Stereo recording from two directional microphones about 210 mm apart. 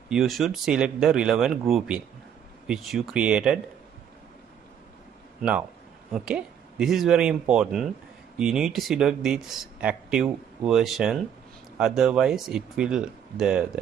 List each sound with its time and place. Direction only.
0.1 s speech: centre (ahead or behind)
5.4 s speech: 5° right (ahead or behind)